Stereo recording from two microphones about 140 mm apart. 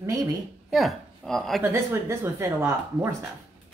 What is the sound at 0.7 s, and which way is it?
Speech, centre (ahead or behind).